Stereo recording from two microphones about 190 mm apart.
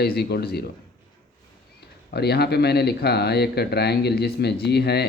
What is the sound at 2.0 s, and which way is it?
Speech, 60° left (ahead or behind).